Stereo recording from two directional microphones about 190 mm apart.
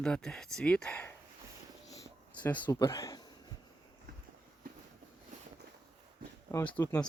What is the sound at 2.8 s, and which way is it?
Speech, 20° left (ahead or behind).